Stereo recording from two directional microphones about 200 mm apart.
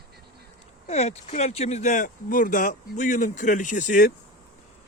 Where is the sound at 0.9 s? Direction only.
35° left (ahead or behind).